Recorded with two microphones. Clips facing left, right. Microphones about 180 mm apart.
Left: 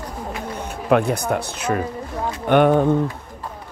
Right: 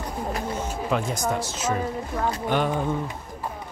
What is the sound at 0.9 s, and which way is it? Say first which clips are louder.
Speech: left 8 dB; 65° left (ahead or behind).